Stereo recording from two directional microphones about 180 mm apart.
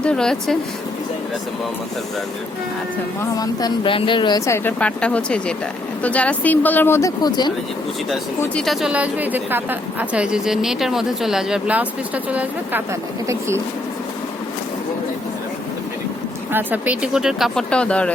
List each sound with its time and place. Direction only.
0.0 s a woman's voice: 5° left (ahead or behind)
3.3 s speech: 20° left (ahead or behind)
8.4 s a woman's voice: 5° left (ahead or behind)
16.5 s a woman's voice: 10° right (ahead or behind); by 18.1 s 5° left (ahead or behind)